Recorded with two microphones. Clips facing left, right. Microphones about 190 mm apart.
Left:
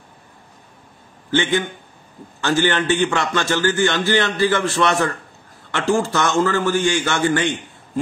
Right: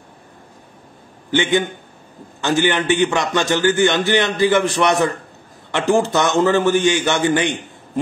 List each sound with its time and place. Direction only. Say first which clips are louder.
1.3 s a man's voice: right 2 dB; 15° right (ahead or behind)